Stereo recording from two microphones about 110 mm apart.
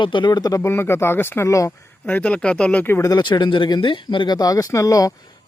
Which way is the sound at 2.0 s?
15° left (ahead or behind).